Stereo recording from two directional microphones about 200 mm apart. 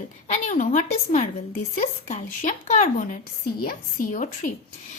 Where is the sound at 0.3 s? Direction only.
40° left (ahead or behind).